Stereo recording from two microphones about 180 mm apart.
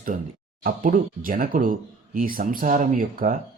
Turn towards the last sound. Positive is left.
turn(degrees=-50)  # may be behind; listen again after turning